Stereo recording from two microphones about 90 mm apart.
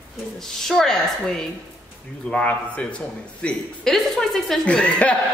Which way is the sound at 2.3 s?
15° left (ahead or behind).